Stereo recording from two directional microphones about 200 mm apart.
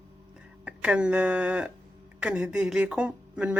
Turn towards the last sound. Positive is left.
turn(degrees=-5)  # may be behind; listen again after turning